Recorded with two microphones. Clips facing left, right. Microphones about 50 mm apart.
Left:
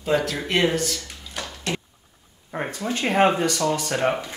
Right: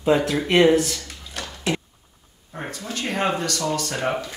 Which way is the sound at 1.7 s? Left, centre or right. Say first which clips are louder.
Right 4 dB; centre.